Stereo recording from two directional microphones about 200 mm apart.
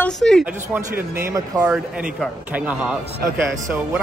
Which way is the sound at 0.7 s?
10° right (ahead or behind).